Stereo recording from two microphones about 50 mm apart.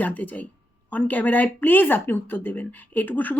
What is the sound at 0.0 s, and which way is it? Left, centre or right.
Speech, left.